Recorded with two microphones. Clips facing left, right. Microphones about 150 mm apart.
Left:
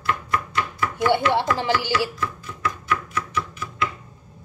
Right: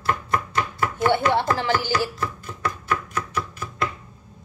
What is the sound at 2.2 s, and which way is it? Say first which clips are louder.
Chopping: even; 40° right (ahead or behind).